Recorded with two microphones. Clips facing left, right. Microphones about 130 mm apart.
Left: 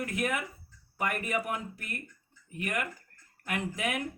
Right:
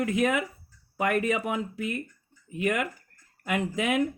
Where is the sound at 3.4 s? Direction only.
90° right.